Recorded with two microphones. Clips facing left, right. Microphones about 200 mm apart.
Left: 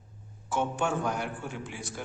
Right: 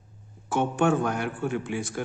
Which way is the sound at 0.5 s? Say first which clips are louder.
Right 6 dB; 60° right (ahead or behind).